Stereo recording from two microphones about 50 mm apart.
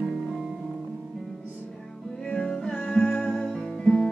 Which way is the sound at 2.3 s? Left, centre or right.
Centre.